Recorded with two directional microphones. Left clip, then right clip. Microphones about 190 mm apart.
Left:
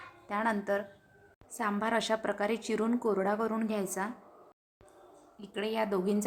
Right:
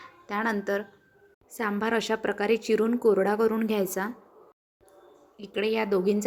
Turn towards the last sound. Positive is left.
turn(degrees=-15)  # may be behind; listen again after turning